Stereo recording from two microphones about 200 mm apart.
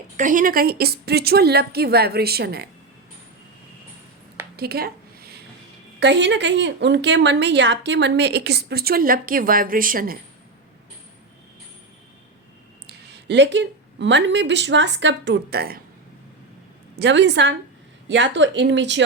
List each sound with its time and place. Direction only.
0.2 s a woman's voice: 40° right (ahead or behind)
4.5 s a sound: 50° right (ahead or behind)
6.0 s a woman's voice: 60° right (ahead or behind); by 10.2 s 45° right (ahead or behind)
12.9 s speech: 55° right (ahead or behind)
17.0 s a woman's voice: 60° right (ahead or behind)